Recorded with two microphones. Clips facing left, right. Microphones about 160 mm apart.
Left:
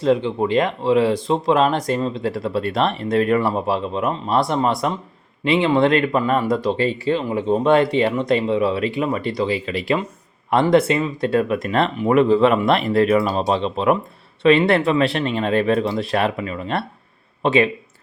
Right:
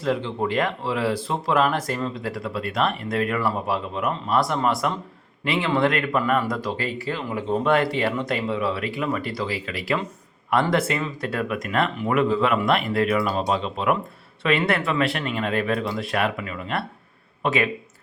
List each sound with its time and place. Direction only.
0.0 s speech: 20° left (ahead or behind)